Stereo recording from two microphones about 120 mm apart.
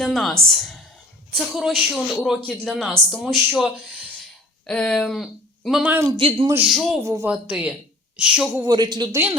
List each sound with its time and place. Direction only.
0.0 s a woman's voice: centre (ahead or behind)
5.8 s a man's voice: 15° right (ahead or behind)
6.1 s speech: 50° right (ahead or behind)
6.7 s a man's voice: centre (ahead or behind)
7.0 s speech: 25° right (ahead or behind)
7.3 s a woman's voice: 10° right (ahead or behind)
8.5 s speech: 35° right (ahead or behind)
9.1 s a man's voice: 15° right (ahead or behind)